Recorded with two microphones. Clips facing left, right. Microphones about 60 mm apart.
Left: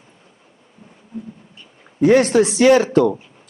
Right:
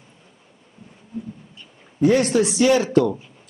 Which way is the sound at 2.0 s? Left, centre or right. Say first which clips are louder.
Left 4 dB; left.